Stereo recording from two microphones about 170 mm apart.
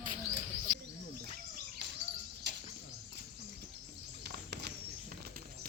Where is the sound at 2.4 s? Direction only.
90° right.